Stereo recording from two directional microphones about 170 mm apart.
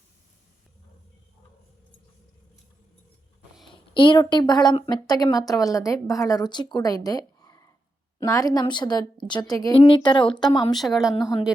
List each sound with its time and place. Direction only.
3.7 s a woman's voice: 30° left (ahead or behind)